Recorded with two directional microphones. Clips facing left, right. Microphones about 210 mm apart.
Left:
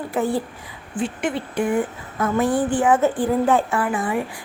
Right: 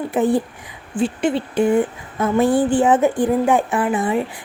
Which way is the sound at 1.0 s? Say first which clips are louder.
Right 5 dB; 30° right (ahead or behind).